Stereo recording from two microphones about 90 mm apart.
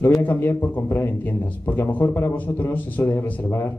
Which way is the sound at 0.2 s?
20° left (ahead or behind).